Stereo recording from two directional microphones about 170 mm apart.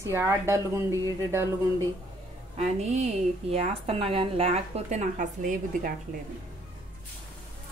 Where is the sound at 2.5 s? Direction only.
40° right (ahead or behind).